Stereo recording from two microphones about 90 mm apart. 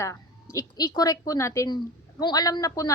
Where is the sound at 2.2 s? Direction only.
45° left (ahead or behind).